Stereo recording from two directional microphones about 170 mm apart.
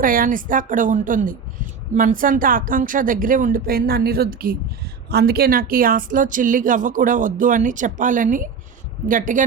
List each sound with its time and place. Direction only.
0.0 s a woman's voice: 55° right (ahead or behind)